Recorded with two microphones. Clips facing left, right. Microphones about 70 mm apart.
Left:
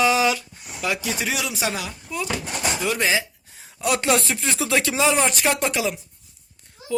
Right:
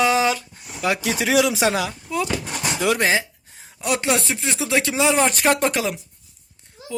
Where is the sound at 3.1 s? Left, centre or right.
Right.